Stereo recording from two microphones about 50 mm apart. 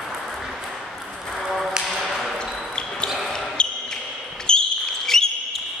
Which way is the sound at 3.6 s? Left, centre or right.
Centre.